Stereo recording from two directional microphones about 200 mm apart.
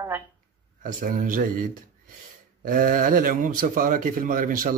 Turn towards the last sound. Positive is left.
turn(degrees=-45)  # may be behind; listen again after turning